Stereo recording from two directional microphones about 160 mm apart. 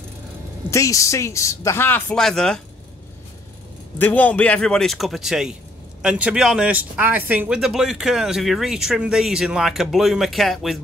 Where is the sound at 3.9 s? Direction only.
10° left (ahead or behind).